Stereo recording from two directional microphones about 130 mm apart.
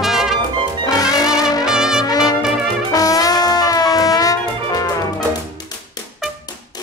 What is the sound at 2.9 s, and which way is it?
Music, 30° left (ahead or behind).